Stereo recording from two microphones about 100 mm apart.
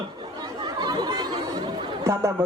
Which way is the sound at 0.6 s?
45° right (ahead or behind).